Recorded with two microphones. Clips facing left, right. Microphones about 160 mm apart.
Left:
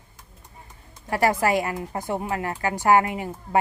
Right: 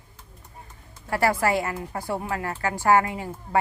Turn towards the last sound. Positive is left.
turn(degrees=20)  # may be behind; listen again after turning